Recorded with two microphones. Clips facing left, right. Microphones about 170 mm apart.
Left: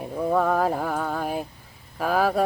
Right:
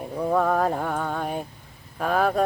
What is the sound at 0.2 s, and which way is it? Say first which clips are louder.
Mantra: even; centre (ahead or behind).